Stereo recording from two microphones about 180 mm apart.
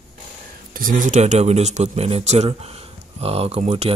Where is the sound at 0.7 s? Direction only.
50° right (ahead or behind).